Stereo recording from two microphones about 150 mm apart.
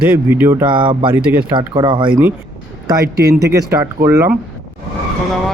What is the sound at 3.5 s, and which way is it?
Speech, 20° right (ahead or behind).